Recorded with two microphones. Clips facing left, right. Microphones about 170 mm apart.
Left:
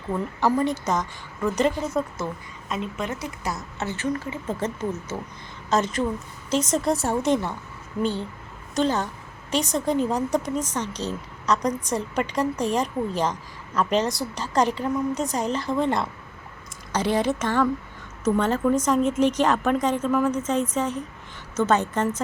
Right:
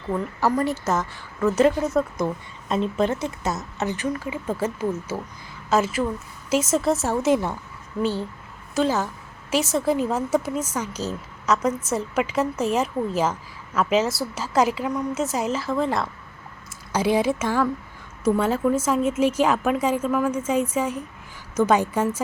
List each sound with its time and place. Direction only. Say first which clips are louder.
0.1 s speech: even; centre (ahead or behind)
2.6 s a woman's voice: right 7 dB; 30° right (ahead or behind); by 7.3 s 5° right (ahead or behind)
8.7 s a woman's voice: right 1 dB; 5° right (ahead or behind)